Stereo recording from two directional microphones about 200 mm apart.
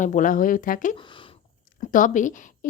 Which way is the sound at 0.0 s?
40° left (ahead or behind).